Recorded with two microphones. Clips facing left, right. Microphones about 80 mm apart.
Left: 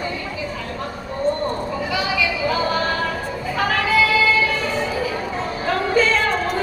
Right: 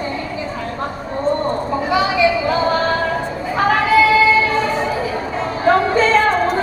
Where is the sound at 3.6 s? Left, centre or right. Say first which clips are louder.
Right 6 dB; right.